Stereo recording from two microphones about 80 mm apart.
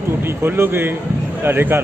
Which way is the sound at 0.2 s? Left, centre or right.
Right.